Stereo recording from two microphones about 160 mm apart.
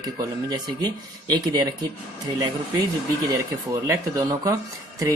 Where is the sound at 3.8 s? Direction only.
20° right (ahead or behind).